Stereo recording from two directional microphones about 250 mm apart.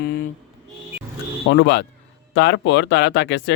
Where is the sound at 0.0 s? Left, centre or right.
Left.